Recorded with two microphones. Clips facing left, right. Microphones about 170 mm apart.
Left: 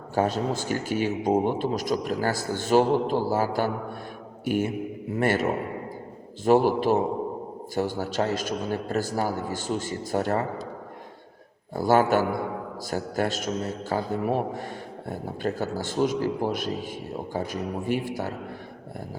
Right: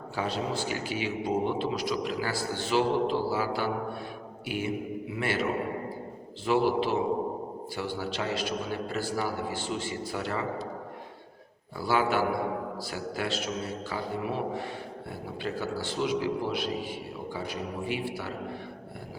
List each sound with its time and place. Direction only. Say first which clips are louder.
0.1 s a man's voice: left 6 dB; 45° left (ahead or behind)
11.8 s a man's voice: left 6 dB; 45° left (ahead or behind)